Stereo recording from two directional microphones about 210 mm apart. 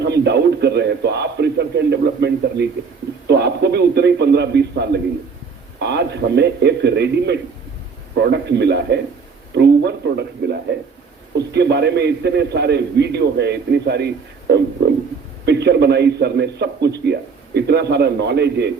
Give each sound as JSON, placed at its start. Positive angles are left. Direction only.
{"t": 0.0, "sound": "a man's voice", "side_deg": -55}
{"t": 3.2, "sound": "a sound", "side_deg": -55}
{"t": 5.8, "sound": "a man's voice", "side_deg": -55}